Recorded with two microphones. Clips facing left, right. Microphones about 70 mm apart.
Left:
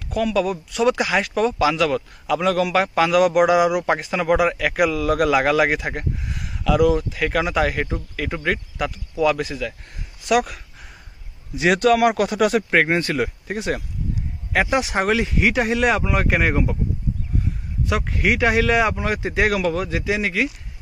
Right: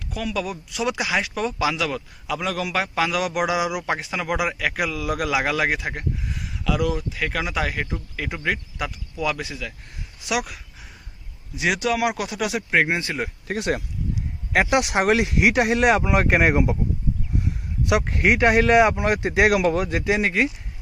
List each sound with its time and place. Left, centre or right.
0.1 s a man's voice: centre
18.0 s speech: centre
18.3 s speech: centre